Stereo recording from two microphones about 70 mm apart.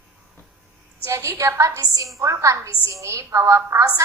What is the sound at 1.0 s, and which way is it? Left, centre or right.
A woman's voice, right.